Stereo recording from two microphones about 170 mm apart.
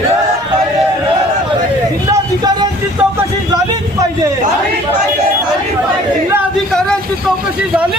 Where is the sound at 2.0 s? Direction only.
20° right (ahead or behind).